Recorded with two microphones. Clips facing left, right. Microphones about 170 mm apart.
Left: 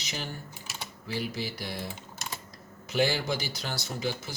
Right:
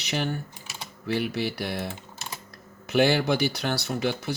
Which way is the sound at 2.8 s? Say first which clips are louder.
Right 6 dB; 65° right (ahead or behind).